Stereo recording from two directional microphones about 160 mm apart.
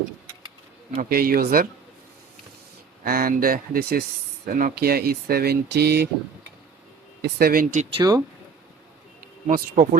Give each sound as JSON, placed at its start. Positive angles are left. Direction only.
{"t": 1.1, "sound": "speech", "side_deg": -70}
{"t": 3.0, "sound": "speech", "side_deg": -65}
{"t": 4.5, "sound": "speech", "side_deg": -65}
{"t": 7.2, "sound": "speech", "side_deg": -70}
{"t": 7.9, "sound": "speech", "side_deg": -25}
{"t": 9.5, "sound": "speech", "side_deg": -55}